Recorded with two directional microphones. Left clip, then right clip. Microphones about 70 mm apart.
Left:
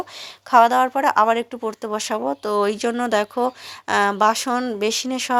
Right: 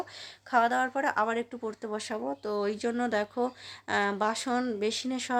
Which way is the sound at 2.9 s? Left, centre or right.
Left.